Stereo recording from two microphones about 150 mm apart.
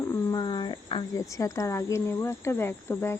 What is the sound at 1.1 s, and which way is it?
Speech, 20° left (ahead or behind).